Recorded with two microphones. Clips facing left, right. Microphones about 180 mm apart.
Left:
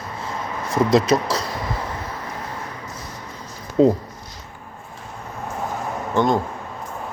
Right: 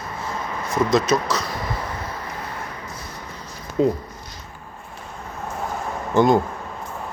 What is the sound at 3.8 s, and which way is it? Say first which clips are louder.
Speech: left 4 dB; 30° left (ahead or behind).